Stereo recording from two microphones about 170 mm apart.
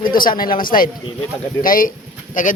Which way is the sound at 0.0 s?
55° left (ahead or behind).